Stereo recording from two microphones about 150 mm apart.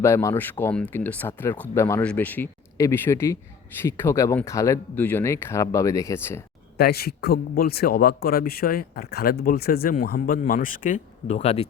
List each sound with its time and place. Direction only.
0.0 s speech: 20° left (ahead or behind)
6.7 s speech: 90° left; by 11.7 s 45° left (ahead or behind)